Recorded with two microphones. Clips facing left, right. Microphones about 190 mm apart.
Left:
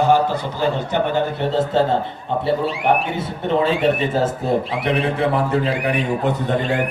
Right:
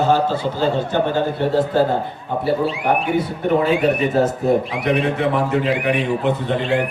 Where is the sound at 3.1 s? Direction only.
25° left (ahead or behind); by 6.7 s 45° left (ahead or behind).